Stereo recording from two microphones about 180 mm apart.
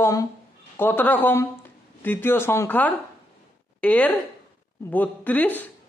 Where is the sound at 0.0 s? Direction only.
20° left (ahead or behind).